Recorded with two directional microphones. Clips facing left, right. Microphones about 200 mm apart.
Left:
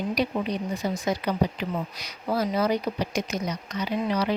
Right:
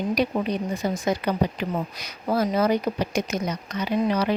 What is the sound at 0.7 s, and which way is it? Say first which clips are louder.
A woman's voice: right 2 dB; 50° right (ahead or behind).